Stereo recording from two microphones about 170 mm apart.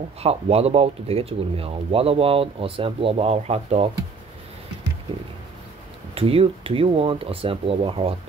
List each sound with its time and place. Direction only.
0.2 s speech: 35° right (ahead or behind)
6.1 s speech: 35° right (ahead or behind)